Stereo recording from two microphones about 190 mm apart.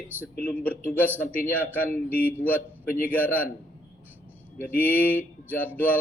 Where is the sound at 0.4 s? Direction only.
10° left (ahead or behind).